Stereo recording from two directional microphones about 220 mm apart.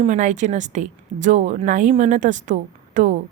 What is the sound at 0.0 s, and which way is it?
Speech, 35° right (ahead or behind).